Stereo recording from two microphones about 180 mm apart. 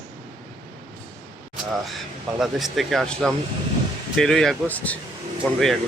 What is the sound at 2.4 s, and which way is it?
Speech, centre (ahead or behind).